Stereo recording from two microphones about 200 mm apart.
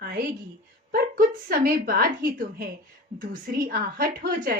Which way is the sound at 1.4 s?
45° right (ahead or behind).